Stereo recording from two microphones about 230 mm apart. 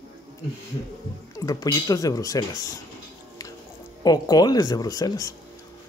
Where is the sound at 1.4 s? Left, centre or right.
Centre.